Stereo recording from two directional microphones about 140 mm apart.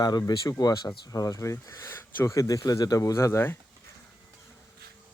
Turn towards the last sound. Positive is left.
turn(degrees=20)  # may be behind; listen again after turning